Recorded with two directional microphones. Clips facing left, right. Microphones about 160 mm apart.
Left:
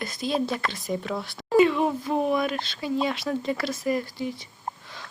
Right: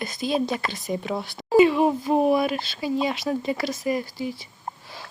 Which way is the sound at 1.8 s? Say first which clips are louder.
Right 4 dB; 15° right (ahead or behind).